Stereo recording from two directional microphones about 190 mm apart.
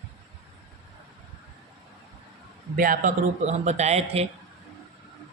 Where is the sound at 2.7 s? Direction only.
45° right (ahead or behind).